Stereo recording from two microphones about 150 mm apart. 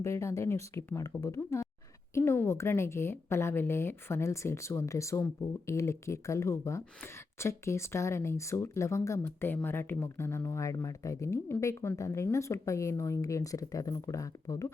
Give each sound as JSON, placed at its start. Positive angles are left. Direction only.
{"t": 0.0, "sound": "a woman's voice", "side_deg": 20}